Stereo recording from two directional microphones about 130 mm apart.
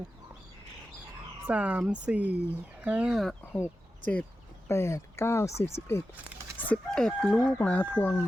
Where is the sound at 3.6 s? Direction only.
10° left (ahead or behind).